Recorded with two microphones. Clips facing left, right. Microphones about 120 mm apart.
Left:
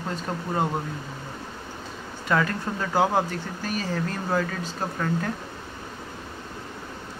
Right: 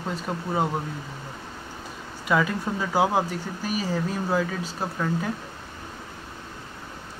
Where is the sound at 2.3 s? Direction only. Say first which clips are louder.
Right 1 dB; 5° right (ahead or behind).